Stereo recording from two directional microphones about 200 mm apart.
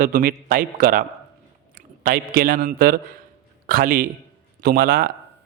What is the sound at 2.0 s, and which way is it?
Speech, 45° right (ahead or behind).